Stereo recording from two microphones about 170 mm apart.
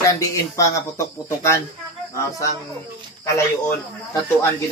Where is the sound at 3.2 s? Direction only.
15° left (ahead or behind).